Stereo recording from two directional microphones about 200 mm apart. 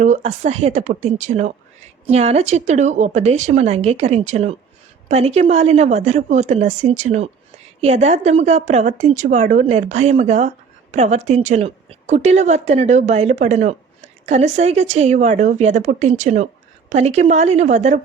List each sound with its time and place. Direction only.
0.0 s a woman's voice: 35° right (ahead or behind)